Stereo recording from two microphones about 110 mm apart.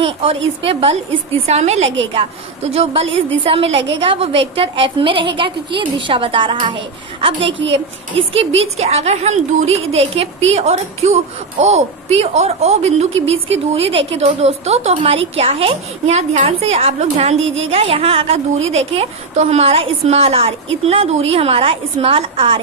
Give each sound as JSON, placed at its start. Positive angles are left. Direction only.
{"t": 0.0, "sound": "a woman's voice", "side_deg": -60}